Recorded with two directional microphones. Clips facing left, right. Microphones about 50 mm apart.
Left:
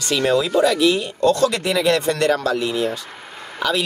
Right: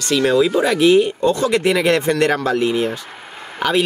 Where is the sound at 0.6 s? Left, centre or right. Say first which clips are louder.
Right 4 dB; right.